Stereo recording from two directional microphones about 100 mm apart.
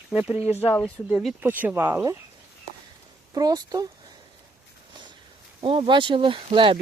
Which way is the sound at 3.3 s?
40° right (ahead or behind).